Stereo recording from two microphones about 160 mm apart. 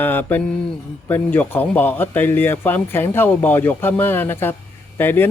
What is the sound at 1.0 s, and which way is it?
A man's voice, 10° left (ahead or behind).